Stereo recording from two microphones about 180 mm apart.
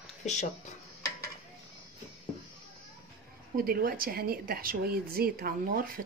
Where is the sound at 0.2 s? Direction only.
40° left (ahead or behind).